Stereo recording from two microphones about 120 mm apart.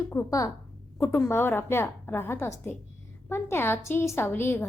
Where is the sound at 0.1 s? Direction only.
25° left (ahead or behind).